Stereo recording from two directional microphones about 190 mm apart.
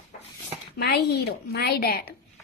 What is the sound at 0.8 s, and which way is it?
A woman's voice, 60° left (ahead or behind).